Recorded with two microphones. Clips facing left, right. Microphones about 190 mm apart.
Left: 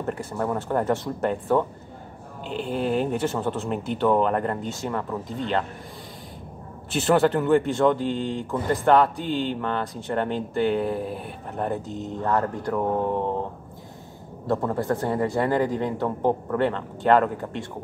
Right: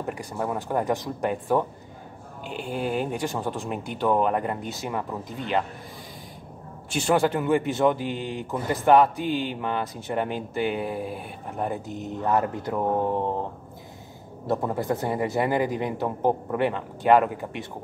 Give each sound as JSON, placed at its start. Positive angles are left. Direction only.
{"t": 0.0, "sound": "a man's voice", "side_deg": -10}
{"t": 6.9, "sound": "a man's voice", "side_deg": 0}
{"t": 11.9, "sound": "a man's voice", "side_deg": -15}
{"t": 14.5, "sound": "a man's voice", "side_deg": -15}